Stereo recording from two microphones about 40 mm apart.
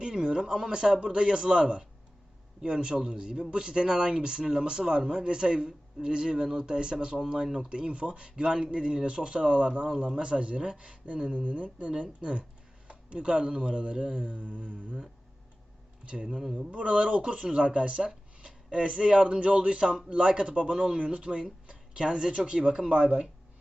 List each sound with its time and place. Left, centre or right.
0.1 s speech: centre
7.4 s speech: centre
7.7 s speech: right
16.2 s speech: centre
16.7 s speech: right
20.7 s speech: centre
21.0 s speech: right